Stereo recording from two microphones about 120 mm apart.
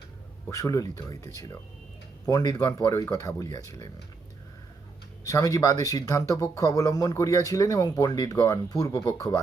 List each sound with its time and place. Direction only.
0.5 s speech: 30° left (ahead or behind)
5.2 s speech: 30° left (ahead or behind)